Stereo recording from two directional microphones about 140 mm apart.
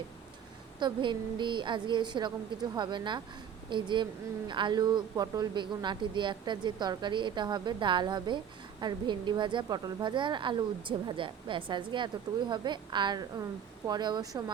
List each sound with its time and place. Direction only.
0.8 s a woman's voice: 35° right (ahead or behind)